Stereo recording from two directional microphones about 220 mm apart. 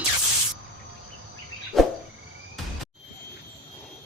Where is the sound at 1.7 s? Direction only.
Centre (ahead or behind).